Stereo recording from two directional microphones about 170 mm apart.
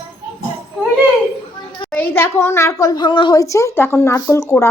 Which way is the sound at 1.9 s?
10° left (ahead or behind).